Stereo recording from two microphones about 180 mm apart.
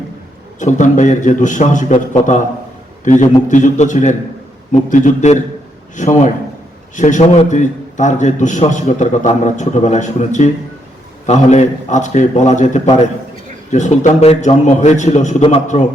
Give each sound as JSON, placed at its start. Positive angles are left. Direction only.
{"t": 0.6, "sound": "a man's voice", "side_deg": 45}